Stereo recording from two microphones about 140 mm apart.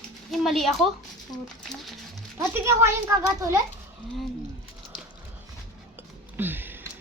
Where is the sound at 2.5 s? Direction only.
20° right (ahead or behind).